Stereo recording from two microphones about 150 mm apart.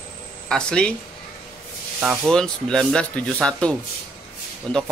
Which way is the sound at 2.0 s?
Centre (ahead or behind).